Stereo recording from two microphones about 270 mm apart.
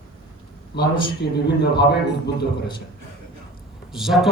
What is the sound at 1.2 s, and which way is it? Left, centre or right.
Speech, left.